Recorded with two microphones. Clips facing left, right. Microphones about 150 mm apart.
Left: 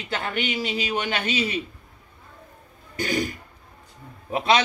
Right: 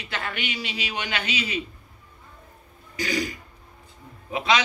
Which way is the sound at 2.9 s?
55° left (ahead or behind).